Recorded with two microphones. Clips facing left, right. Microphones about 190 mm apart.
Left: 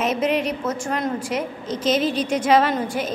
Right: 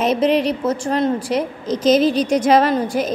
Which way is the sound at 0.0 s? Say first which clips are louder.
Right 5 dB; 35° right (ahead or behind).